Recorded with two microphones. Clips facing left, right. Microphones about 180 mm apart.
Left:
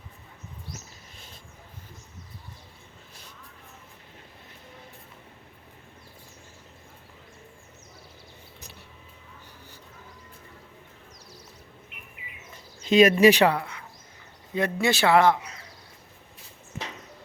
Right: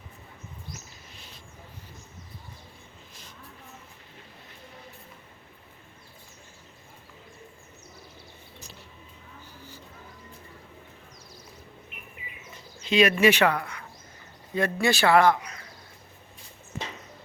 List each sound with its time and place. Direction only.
1.1 s bird: 50° left (ahead or behind)
12.8 s a man's voice: 45° left (ahead or behind); by 15.6 s 25° left (ahead or behind)